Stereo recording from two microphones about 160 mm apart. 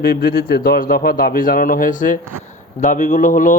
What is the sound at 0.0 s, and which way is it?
A man's voice, 70° left (ahead or behind).